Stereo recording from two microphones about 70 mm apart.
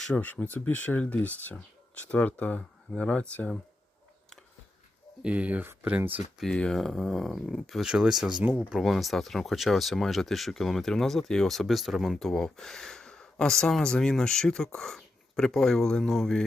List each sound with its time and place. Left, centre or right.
0.1 s speech: left
5.2 s speech: centre
6.4 s speech: centre
7.9 s speech: centre
8.4 s speech: right
8.8 s speech: centre